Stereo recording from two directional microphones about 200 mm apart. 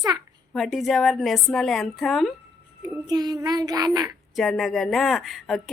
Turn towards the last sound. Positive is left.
turn(degrees=0)  # may be behind; listen again after turning